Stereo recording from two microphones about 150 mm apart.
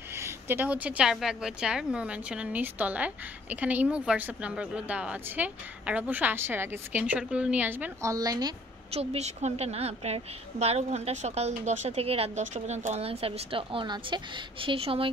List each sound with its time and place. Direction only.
0.1 s a woman's voice: 15° right (ahead or behind)
8.9 s a woman's voice: 45° right (ahead or behind)